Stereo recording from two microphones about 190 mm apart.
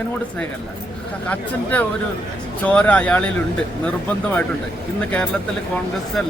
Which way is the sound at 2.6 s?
5° left (ahead or behind).